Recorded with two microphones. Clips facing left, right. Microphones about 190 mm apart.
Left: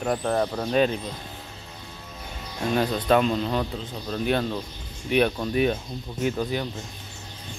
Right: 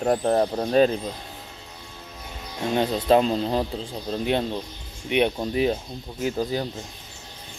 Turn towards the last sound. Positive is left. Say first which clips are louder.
# right 1 dB
turn(degrees=-35)  # may be behind; listen again after turning